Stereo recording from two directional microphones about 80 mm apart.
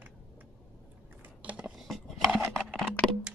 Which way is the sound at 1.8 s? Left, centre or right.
Centre.